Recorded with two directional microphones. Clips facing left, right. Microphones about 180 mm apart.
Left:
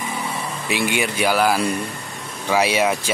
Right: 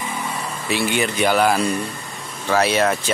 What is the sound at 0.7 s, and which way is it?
Speech, 15° left (ahead or behind).